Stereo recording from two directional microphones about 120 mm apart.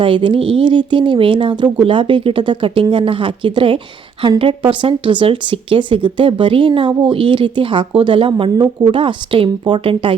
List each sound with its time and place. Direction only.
0.0 s speech: 45° right (ahead or behind)